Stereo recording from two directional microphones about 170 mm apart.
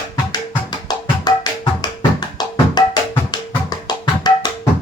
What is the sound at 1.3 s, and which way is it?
Music, 25° left (ahead or behind).